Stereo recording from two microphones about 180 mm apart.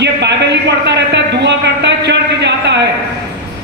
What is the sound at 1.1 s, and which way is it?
Speech, 75° right (ahead or behind).